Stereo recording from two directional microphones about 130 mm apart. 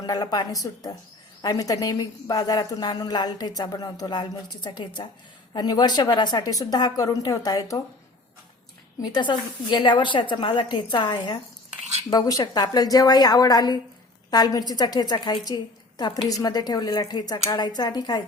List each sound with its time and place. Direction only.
0.0 s a woman's voice: 30° left (ahead or behind)
9.0 s a woman's voice: 35° left (ahead or behind)